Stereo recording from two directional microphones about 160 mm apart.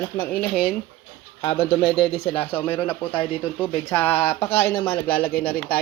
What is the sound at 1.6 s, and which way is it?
Speech, 40° left (ahead or behind).